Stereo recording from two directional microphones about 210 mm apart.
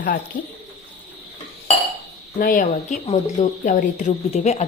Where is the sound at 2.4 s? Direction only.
40° left (ahead or behind).